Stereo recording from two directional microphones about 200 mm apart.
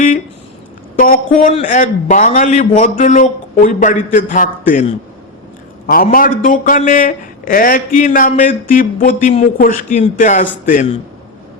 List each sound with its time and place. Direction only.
0.9 s a man's voice: 45° left (ahead or behind)